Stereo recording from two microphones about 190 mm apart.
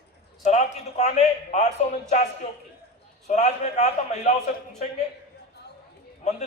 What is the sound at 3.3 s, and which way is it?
A man's voice, 40° left (ahead or behind).